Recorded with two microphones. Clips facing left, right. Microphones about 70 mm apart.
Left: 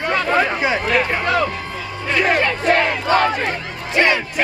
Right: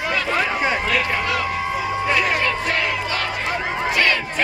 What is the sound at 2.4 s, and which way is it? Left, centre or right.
Crowd, left.